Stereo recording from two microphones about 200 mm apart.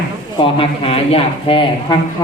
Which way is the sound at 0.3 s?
25° left (ahead or behind).